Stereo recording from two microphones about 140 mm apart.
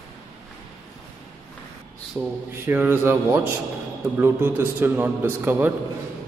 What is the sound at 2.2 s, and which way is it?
A man's voice, 15° right (ahead or behind).